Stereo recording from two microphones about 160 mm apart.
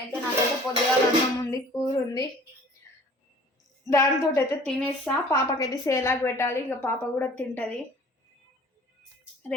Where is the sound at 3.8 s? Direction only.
15° left (ahead or behind).